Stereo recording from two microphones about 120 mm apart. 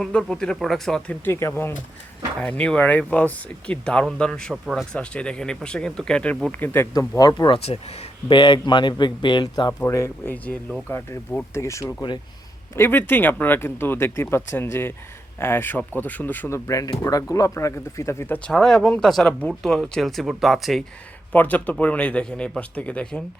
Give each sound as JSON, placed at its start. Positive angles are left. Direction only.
{"t": 0.0, "sound": "speech", "side_deg": 5}
{"t": 1.2, "sound": "speech", "side_deg": 20}
{"t": 2.4, "sound": "speech", "side_deg": 10}
{"t": 4.5, "sound": "speech", "side_deg": -5}
{"t": 6.5, "sound": "speech", "side_deg": 20}
{"t": 7.2, "sound": "speech", "side_deg": 35}
{"t": 7.6, "sound": "speech", "side_deg": 60}
{"t": 8.3, "sound": "speech", "side_deg": 40}
{"t": 9.8, "sound": "speech", "side_deg": 25}
{"t": 18.4, "sound": "speech", "side_deg": 5}
{"t": 21.3, "sound": "speech", "side_deg": 15}